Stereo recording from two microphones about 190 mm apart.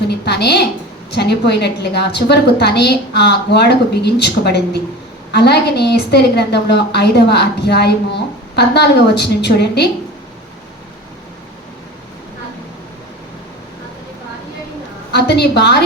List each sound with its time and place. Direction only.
0.1 s a sound: 60° left (ahead or behind)
1.1 s a woman's voice: 60° left (ahead or behind)
15.1 s a woman's voice: 60° left (ahead or behind)